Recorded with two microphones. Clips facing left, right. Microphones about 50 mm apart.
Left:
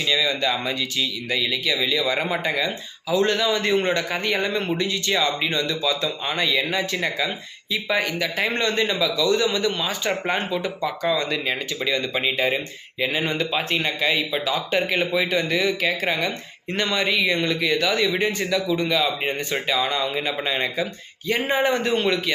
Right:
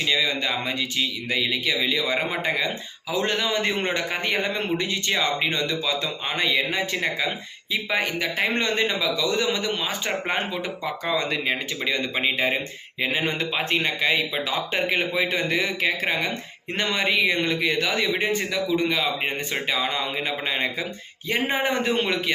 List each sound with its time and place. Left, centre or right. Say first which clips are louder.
0.0 s speech: left 2 dB; right